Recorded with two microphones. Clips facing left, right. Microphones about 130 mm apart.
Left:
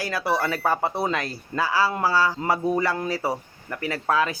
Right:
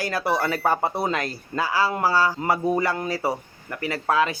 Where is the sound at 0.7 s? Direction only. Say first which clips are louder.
Right 1 dB; 15° right (ahead or behind).